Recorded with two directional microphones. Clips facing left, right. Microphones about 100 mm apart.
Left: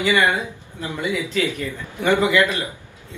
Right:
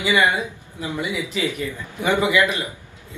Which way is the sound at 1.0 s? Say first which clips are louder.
Left 4 dB; 15° right (ahead or behind).